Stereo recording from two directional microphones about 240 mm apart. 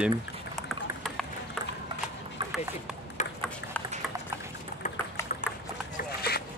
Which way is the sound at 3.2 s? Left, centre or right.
Left.